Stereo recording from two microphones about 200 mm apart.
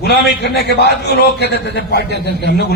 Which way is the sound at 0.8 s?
55° left (ahead or behind).